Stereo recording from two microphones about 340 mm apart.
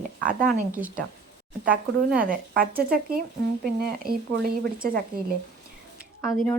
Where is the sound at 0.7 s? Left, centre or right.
Centre.